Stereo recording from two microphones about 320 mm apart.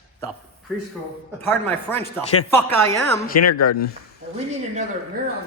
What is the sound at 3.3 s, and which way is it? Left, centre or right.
Speech, left.